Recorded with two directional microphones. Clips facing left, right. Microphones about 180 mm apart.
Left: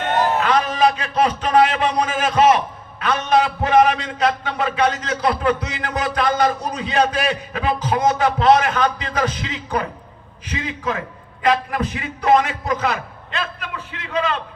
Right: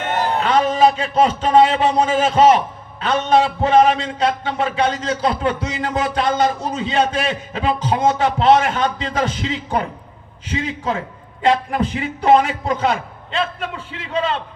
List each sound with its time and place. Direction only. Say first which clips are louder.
0.3 s a man's voice: right 2 dB; 25° right (ahead or behind)